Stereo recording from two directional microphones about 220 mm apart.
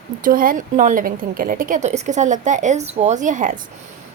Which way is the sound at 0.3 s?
40° right (ahead or behind).